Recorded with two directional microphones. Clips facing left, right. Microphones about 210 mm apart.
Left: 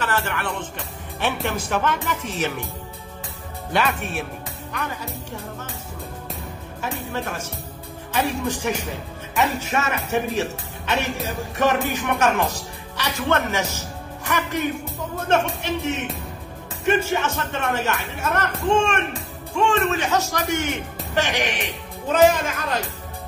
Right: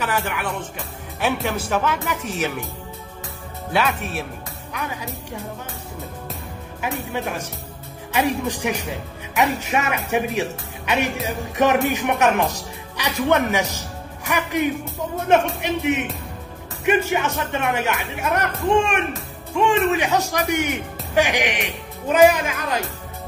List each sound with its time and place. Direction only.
0.0 s a man's voice: 10° right (ahead or behind)
3.7 s a man's voice: centre (ahead or behind)
6.8 s a man's voice: 15° right (ahead or behind)
11.5 s a man's voice: 15° right (ahead or behind)